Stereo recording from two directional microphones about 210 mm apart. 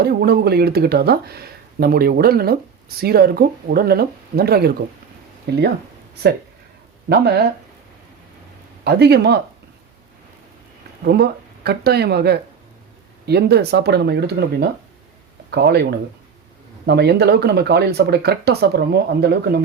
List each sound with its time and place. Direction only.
0.0 s speech: 50° right (ahead or behind)
7.1 s speech: 50° right (ahead or behind)
8.8 s speech: 50° right (ahead or behind)
11.0 s speech: 50° right (ahead or behind)